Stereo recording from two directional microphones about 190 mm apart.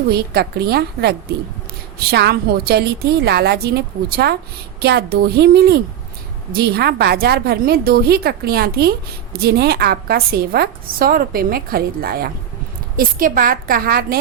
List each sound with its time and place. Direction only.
0.1 s a woman's voice: 55° right (ahead or behind)